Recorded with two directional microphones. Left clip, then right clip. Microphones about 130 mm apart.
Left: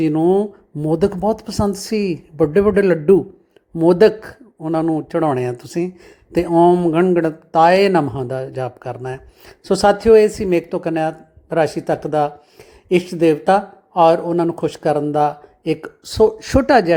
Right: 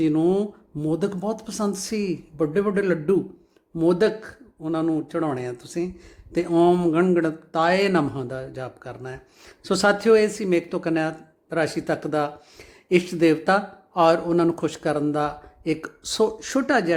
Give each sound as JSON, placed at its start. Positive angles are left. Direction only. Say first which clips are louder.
{"t": 0.1, "sound": "speech", "louder": "left 6 dB", "side_deg": 20}
{"t": 0.9, "sound": "speech", "louder": "left 8 dB", "side_deg": 35}
{"t": 6.5, "sound": "speech", "louder": "left 6 dB", "side_deg": 20}
{"t": 7.1, "sound": "speech", "louder": "left 6 dB", "side_deg": 30}
{"t": 16.4, "sound": "speech", "louder": "left 9 dB", "side_deg": 35}